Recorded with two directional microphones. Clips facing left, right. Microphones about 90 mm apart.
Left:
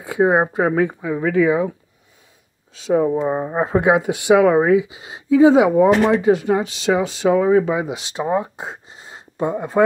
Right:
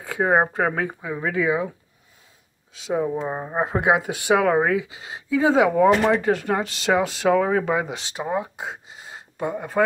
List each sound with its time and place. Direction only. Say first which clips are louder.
0.0 s speech: left 4 dB; 15° left (ahead or behind)
0.7 s speech: left 7 dB; 30° left (ahead or behind)
2.8 s speech: left 7 dB; 40° left (ahead or behind)
3.2 s speech: left 7 dB; 15° left (ahead or behind)
3.6 s speech: left 4 dB; 30° left (ahead or behind)
6.0 s speech: left 4 dB; 5° left (ahead or behind)
8.2 s speech: left 5 dB; 35° left (ahead or behind)